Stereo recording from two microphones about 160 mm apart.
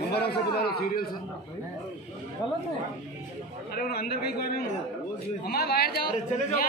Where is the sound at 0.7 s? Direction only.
75° left (ahead or behind).